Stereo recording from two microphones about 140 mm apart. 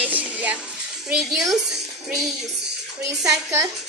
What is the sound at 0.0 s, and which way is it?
Music, 10° right (ahead or behind).